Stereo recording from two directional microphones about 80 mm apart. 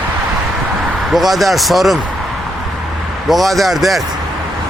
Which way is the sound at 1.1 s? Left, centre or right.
Centre.